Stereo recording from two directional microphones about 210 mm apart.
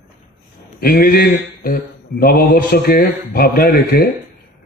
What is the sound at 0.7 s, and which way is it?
Mantra, 45° left (ahead or behind).